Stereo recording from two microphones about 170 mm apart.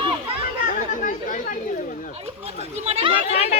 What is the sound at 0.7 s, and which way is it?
Chatter, 50° left (ahead or behind).